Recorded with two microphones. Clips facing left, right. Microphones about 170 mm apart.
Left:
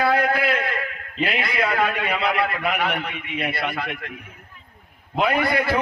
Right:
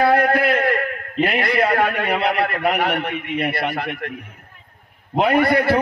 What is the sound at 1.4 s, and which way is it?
A man's voice, 60° right (ahead or behind).